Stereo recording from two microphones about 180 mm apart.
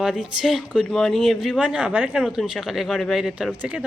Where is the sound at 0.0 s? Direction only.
5° right (ahead or behind).